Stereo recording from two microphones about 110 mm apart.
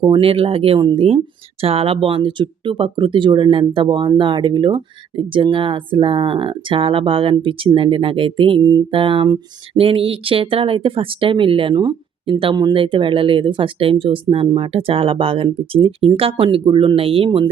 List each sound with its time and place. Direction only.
0.0 s speech: 50° right (ahead or behind)
9.7 s speech: 60° right (ahead or behind)